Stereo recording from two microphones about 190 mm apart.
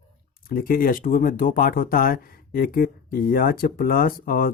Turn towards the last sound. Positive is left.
turn(degrees=50)  # may be behind; listen again after turning